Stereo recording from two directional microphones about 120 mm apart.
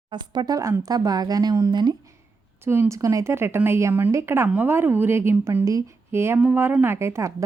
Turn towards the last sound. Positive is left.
turn(degrees=-25)  # may be behind; listen again after turning